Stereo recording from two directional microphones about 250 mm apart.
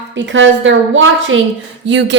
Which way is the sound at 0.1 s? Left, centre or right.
Right.